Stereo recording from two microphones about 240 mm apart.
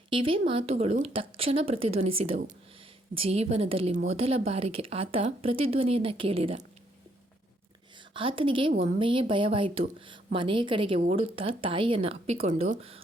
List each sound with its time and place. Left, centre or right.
0.1 s a woman's voice: right
8.1 s a woman's voice: right